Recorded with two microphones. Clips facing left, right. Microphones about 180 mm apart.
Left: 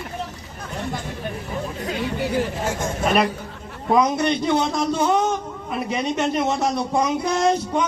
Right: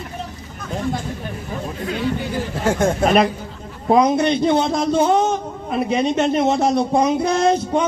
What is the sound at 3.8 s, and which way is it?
Speech, 25° right (ahead or behind).